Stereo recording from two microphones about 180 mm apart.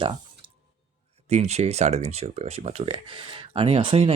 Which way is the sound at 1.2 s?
35° right (ahead or behind).